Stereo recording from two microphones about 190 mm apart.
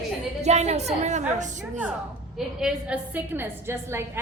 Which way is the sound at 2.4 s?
5° right (ahead or behind).